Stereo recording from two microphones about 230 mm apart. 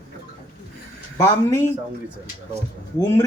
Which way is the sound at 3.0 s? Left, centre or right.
Centre.